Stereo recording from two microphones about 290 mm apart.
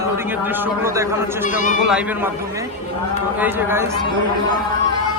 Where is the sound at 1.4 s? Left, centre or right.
Left.